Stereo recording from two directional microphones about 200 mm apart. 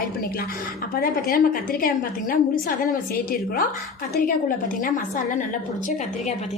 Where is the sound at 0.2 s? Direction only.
50° left (ahead or behind).